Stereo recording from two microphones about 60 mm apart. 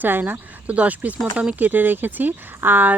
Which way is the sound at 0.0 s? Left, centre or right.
Right.